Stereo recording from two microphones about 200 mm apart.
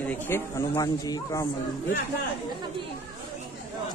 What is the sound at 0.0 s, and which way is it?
Speech, 10° left (ahead or behind).